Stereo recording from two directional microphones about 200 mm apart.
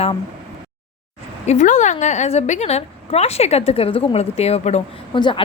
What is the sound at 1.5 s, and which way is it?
A woman's voice, 35° left (ahead or behind).